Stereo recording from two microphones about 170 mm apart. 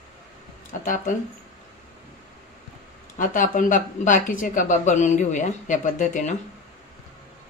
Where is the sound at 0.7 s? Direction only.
50° left (ahead or behind).